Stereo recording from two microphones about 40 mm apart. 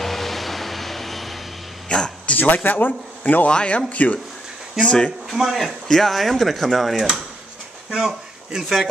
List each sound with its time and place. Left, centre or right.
0.0 s vehicle: centre
1.9 s a man's voice: left
2.2 s a sound: left
2.6 s speech: left
3.4 s speech: left
4.7 s speech: left
5.4 s speech: centre
7.9 s speech: centre